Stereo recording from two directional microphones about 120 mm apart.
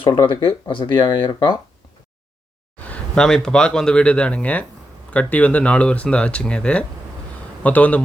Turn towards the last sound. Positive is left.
turn(degrees=10)  # may be behind; listen again after turning